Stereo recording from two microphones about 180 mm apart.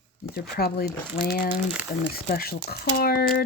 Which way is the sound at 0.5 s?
60° left (ahead or behind).